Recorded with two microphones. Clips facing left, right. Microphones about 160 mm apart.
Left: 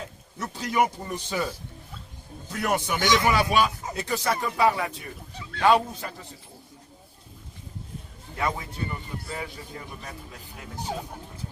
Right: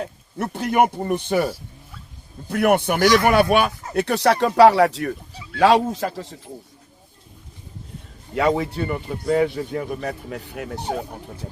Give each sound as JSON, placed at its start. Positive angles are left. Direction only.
{"t": 0.0, "sound": "speech", "side_deg": -60}
{"t": 2.5, "sound": "speech", "side_deg": -60}
{"t": 3.0, "sound": "speech", "side_deg": 20}
{"t": 3.2, "sound": "a man's voice", "side_deg": -60}
{"t": 8.4, "sound": "a man's voice", "side_deg": -80}